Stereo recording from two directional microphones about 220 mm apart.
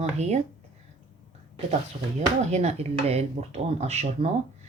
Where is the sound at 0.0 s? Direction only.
30° right (ahead or behind).